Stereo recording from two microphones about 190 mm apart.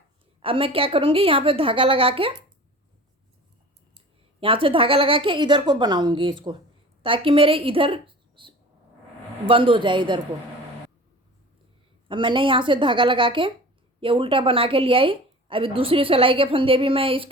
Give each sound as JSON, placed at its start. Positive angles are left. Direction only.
{"t": 0.4, "sound": "a woman's voice", "side_deg": -30}
{"t": 3.9, "sound": "a woman's voice", "side_deg": -30}
{"t": 12.0, "sound": "a woman's voice", "side_deg": -25}